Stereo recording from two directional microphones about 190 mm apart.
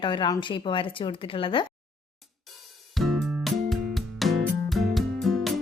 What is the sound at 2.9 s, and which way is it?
Music, centre (ahead or behind).